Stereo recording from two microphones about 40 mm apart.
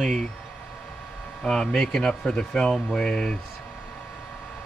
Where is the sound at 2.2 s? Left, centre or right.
Left.